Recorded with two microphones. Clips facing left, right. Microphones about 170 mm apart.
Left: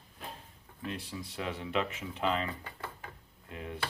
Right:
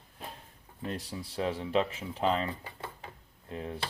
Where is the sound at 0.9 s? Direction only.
35° right (ahead or behind).